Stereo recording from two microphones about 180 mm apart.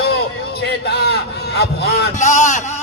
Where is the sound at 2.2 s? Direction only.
40° left (ahead or behind).